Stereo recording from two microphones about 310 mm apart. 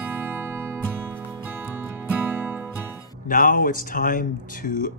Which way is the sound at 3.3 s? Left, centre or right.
Left.